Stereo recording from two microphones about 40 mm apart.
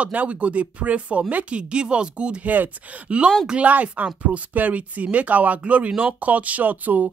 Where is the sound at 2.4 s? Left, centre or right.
Right.